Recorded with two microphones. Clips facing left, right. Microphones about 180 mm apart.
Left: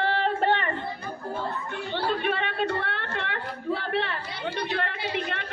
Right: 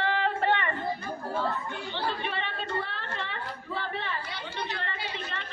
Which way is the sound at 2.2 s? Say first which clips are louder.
Left 7 dB; 60° left (ahead or behind).